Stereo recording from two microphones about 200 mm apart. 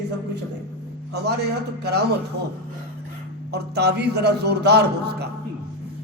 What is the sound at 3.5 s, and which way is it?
A man's voice, 55° right (ahead or behind).